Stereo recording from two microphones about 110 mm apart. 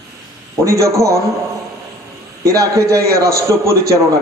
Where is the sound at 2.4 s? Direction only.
30° right (ahead or behind).